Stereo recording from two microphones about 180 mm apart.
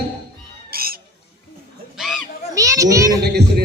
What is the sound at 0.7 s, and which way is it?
Bird, 55° right (ahead or behind).